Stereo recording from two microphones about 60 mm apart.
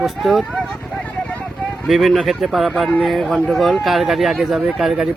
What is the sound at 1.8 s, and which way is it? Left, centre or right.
Speech, centre.